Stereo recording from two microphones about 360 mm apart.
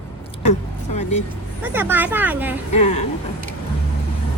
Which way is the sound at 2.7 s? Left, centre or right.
Centre.